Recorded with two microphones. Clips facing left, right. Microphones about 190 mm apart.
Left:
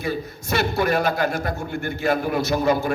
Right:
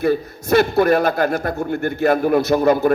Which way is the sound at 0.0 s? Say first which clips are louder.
Right 8 dB; 55° right (ahead or behind).